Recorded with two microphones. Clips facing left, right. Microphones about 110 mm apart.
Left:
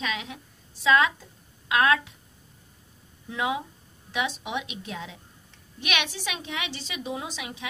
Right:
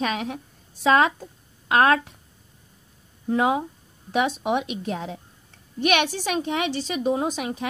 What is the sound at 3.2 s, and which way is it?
A woman's voice, 45° right (ahead or behind).